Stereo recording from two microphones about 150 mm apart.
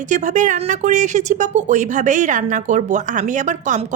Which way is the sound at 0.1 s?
55° right (ahead or behind).